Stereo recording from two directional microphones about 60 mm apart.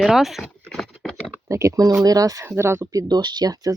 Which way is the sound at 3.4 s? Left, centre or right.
Right.